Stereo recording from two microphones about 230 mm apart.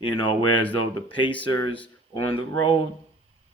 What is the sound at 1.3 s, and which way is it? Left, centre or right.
Speech, centre.